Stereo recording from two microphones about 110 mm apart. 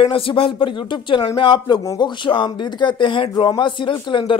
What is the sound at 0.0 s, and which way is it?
Speech, 55° left (ahead or behind).